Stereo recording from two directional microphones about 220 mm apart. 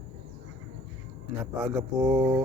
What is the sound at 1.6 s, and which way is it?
Speech, 10° right (ahead or behind).